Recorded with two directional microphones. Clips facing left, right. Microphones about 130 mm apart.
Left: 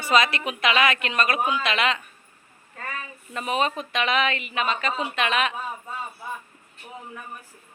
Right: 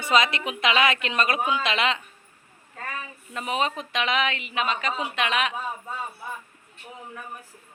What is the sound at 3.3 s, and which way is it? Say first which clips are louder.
A woman's voice: left 2 dB; 15° right (ahead or behind).